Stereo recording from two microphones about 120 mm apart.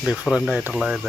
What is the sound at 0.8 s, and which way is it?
Speech, centre (ahead or behind).